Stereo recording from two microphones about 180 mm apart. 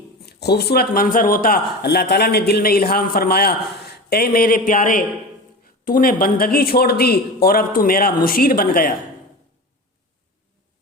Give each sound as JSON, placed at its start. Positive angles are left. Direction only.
{"t": 0.3, "sound": "speech", "side_deg": 65}